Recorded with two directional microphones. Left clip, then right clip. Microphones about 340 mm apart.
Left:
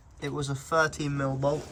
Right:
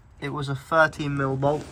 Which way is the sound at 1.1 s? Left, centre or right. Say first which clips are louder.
Right 4 dB; right.